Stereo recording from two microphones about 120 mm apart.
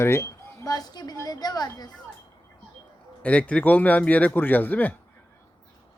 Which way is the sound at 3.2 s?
10° left (ahead or behind).